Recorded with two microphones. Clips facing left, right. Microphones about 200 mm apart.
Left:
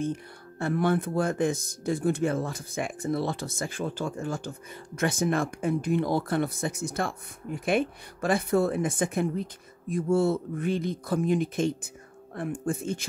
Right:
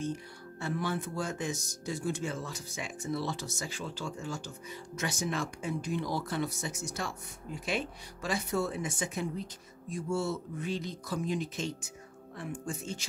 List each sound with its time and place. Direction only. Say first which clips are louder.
0.0 s speech: left 5 dB; 55° left (ahead or behind)